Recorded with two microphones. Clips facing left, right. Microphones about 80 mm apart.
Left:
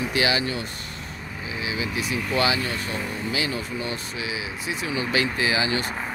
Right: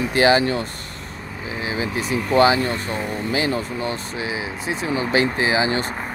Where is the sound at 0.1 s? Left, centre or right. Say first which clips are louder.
Right 10 dB; right.